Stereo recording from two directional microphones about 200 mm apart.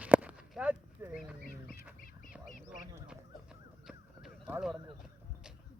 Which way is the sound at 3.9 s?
5° right (ahead or behind).